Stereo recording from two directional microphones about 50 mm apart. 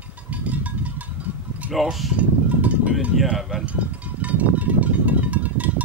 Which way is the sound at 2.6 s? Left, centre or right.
Right.